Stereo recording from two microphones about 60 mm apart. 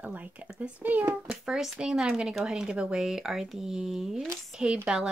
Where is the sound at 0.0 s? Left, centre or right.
Right.